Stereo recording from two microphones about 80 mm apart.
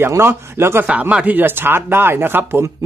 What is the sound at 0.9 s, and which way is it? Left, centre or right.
Speech, centre.